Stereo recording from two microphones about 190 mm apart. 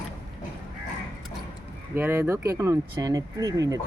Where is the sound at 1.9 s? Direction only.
10° right (ahead or behind).